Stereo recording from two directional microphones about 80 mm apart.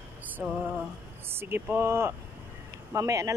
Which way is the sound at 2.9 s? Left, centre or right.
Right.